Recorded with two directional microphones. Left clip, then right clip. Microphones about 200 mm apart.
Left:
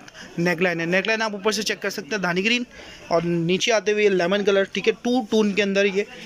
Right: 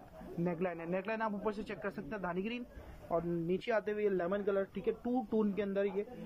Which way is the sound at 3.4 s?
Centre (ahead or behind).